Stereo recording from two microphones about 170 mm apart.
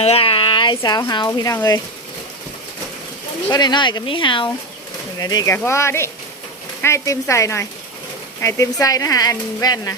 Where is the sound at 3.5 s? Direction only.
25° left (ahead or behind).